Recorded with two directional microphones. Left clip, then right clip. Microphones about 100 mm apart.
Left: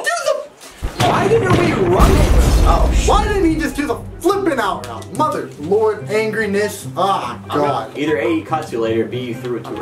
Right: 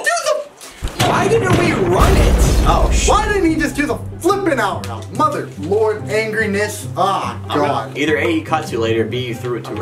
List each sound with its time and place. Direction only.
0.0 s a sound: centre (ahead or behind)
0.9 s speech: 5° right (ahead or behind)
8.0 s speech: 20° right (ahead or behind)